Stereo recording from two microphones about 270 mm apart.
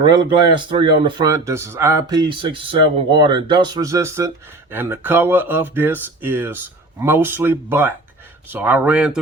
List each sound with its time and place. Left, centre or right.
0.0 s speech: centre